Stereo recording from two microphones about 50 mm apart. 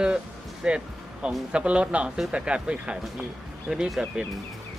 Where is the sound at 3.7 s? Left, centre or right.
Centre.